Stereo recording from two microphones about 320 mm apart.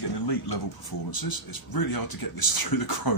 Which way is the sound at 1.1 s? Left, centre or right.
Left.